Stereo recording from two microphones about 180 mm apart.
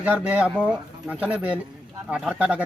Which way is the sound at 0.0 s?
10° right (ahead or behind).